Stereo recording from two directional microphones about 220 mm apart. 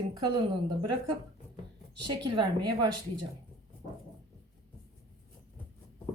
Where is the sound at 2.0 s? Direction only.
20° right (ahead or behind).